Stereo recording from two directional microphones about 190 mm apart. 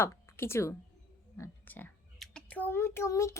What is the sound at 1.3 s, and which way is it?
A child's voice, 10° left (ahead or behind).